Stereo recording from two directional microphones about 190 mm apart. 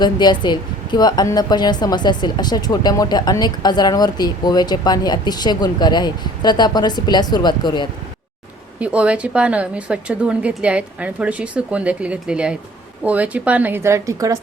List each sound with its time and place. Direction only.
0.0 s a woman's voice: 20° left (ahead or behind)
8.8 s a woman's voice: 5° right (ahead or behind)